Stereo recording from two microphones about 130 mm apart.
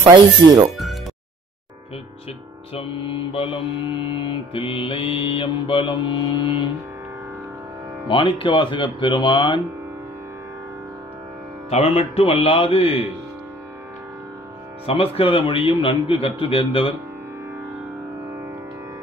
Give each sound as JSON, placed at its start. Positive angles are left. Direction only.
{"t": 0.0, "sound": "speech", "side_deg": -35}
{"t": 2.7, "sound": "mantra", "side_deg": 45}
{"t": 8.1, "sound": "mantra", "side_deg": 40}
{"t": 11.7, "sound": "a man's voice", "side_deg": 55}
{"t": 14.9, "sound": "a man's voice", "side_deg": 45}